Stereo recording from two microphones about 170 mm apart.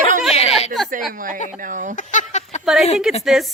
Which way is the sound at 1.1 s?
50° right (ahead or behind).